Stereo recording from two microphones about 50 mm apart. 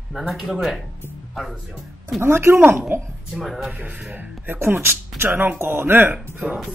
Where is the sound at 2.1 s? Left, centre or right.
Right.